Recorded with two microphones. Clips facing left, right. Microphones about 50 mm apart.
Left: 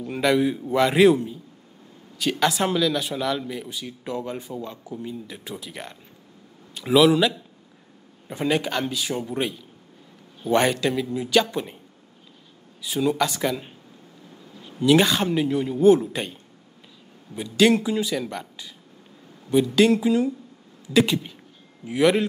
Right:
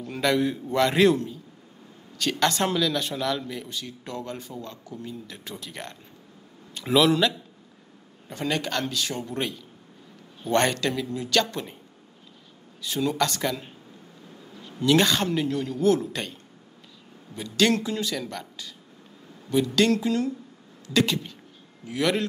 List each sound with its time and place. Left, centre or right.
0.0 s a man's voice: centre
12.8 s speech: centre
17.4 s speech: centre
20.8 s a sound: centre
21.8 s speech: centre